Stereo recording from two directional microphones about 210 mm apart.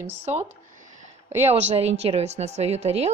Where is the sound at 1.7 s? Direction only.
30° right (ahead or behind).